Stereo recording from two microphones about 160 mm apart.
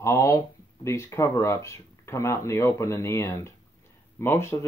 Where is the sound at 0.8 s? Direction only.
20° left (ahead or behind).